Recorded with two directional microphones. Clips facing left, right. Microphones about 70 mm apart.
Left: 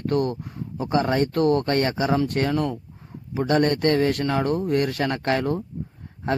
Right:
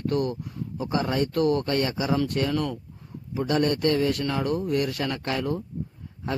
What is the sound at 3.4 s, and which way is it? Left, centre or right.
A man's voice, left.